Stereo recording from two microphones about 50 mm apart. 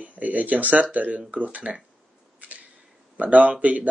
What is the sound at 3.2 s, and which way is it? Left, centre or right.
Speech, right.